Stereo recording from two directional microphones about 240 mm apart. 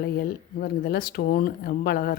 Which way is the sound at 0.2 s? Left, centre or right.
Left.